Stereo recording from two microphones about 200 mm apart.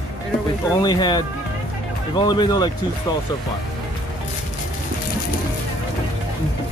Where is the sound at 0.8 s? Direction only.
20° left (ahead or behind).